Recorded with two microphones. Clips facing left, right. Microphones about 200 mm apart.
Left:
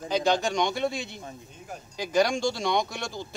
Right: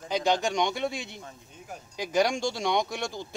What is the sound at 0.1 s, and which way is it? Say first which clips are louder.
Speech: left 1 dB; 15° right (ahead or behind).